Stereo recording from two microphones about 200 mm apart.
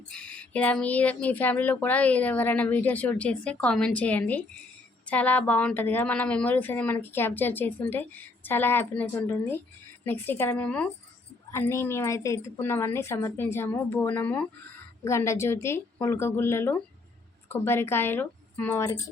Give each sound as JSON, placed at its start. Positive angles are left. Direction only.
{"t": 0.1, "sound": "speech", "side_deg": 5}